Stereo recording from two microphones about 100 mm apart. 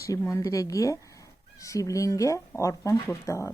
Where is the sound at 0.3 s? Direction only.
30° left (ahead or behind).